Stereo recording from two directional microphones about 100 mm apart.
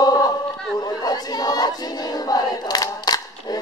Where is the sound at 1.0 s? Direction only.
40° left (ahead or behind).